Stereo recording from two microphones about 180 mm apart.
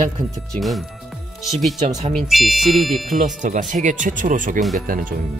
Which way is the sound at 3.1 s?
45° right (ahead or behind).